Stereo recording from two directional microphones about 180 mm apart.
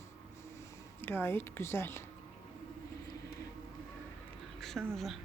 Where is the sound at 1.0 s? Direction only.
10° left (ahead or behind).